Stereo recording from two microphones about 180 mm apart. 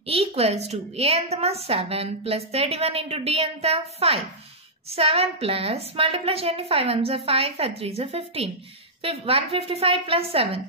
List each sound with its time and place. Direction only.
0.0 s a woman's voice: 30° right (ahead or behind)